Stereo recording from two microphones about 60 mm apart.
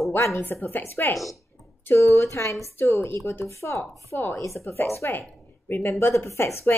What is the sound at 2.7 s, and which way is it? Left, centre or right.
A woman's voice, left.